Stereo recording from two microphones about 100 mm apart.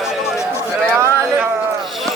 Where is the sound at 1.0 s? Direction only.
25° right (ahead or behind).